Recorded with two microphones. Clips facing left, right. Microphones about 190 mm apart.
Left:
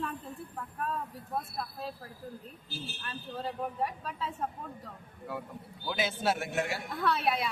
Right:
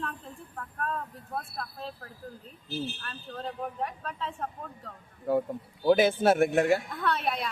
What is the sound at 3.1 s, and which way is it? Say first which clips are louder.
Speech: even; 10° left (ahead or behind).